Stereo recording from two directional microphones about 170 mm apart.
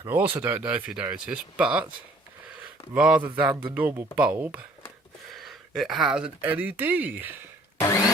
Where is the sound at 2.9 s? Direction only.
5° right (ahead or behind).